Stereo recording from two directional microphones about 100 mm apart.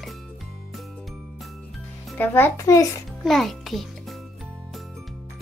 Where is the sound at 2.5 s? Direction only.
30° left (ahead or behind).